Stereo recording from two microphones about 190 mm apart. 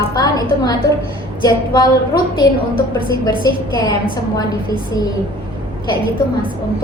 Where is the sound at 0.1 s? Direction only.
20° left (ahead or behind).